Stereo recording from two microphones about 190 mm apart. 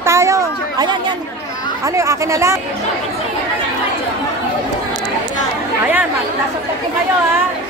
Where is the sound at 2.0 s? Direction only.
15° right (ahead or behind).